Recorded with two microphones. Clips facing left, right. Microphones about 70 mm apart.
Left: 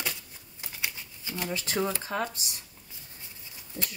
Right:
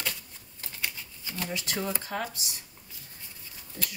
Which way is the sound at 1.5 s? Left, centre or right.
Left.